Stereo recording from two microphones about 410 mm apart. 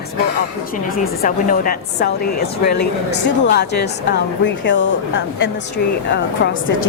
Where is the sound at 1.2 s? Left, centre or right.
Centre.